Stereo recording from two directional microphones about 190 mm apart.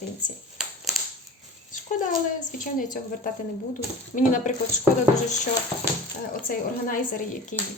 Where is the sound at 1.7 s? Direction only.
40° left (ahead or behind).